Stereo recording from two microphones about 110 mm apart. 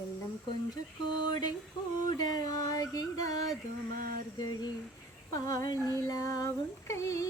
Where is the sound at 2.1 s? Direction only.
35° left (ahead or behind).